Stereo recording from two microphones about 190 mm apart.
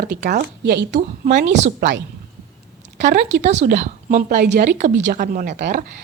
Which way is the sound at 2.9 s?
70° right (ahead or behind).